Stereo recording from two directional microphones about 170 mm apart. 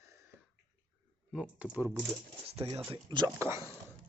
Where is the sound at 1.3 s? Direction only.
5° right (ahead or behind).